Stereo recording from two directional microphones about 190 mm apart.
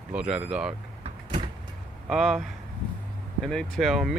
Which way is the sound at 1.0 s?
30° right (ahead or behind).